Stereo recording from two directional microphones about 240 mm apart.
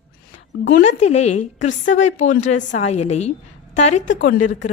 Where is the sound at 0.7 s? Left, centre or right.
Left.